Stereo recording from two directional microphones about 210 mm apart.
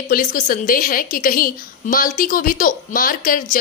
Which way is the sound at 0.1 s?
40° left (ahead or behind).